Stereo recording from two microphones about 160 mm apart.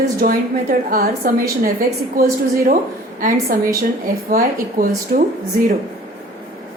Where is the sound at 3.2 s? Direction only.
60° right (ahead or behind).